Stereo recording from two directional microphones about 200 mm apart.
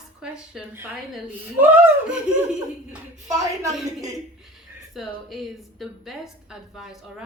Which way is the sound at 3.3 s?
15° right (ahead or behind).